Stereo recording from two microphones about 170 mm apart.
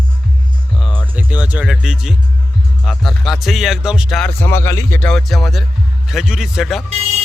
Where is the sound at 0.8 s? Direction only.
5° left (ahead or behind).